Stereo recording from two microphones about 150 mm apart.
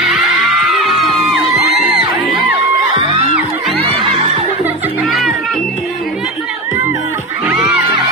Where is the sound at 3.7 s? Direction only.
40° right (ahead or behind).